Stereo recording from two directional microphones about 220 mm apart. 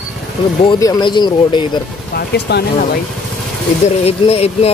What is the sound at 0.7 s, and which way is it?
Speech, 15° left (ahead or behind).